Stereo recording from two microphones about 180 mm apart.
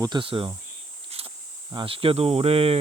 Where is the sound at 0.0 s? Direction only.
25° right (ahead or behind).